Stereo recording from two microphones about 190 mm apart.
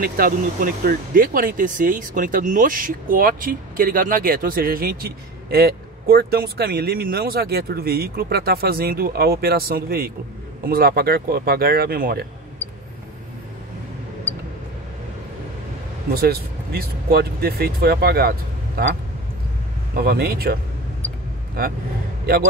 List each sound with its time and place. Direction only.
0.0 s speech: 50° right (ahead or behind)
16.1 s speech: 55° right (ahead or behind)
20.0 s speech: 50° right (ahead or behind)